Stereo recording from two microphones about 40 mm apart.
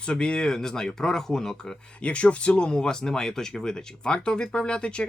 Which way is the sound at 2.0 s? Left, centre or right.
Left.